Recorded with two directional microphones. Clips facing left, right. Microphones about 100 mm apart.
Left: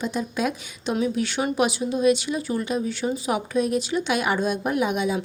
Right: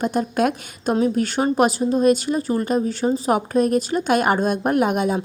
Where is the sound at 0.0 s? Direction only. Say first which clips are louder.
Right 6 dB; 50° right (ahead or behind).